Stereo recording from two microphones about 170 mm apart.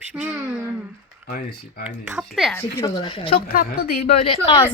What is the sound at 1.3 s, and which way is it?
Speech, 55° left (ahead or behind).